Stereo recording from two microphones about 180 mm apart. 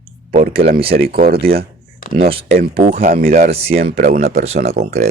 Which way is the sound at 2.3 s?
30° right (ahead or behind).